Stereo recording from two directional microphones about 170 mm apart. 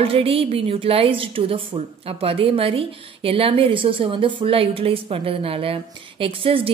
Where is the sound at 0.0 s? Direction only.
35° right (ahead or behind).